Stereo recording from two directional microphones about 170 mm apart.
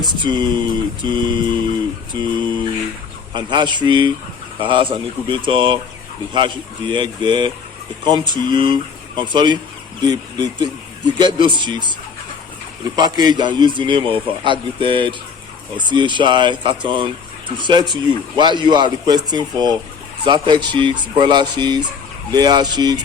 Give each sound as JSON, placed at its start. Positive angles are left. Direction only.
{"t": 0.0, "sound": "a man's voice", "side_deg": -25}
{"t": 13.0, "sound": "a man's voice", "side_deg": -25}